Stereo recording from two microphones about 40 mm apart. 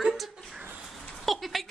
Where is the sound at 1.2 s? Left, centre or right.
Centre.